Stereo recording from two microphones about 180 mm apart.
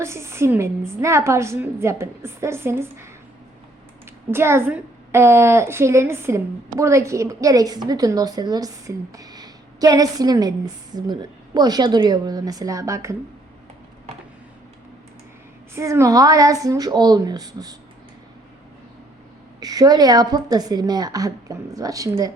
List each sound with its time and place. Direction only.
0.0 s a woman's voice: 15° right (ahead or behind)
4.3 s a woman's voice: 15° right (ahead or behind)
15.7 s a woman's voice: 15° right (ahead or behind)
19.5 s a woman's voice: 20° right (ahead or behind)